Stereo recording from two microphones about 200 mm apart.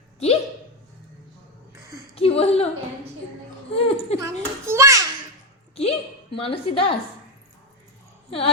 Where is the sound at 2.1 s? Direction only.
30° left (ahead or behind).